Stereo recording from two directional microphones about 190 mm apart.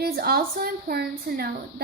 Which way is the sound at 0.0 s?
55° right (ahead or behind).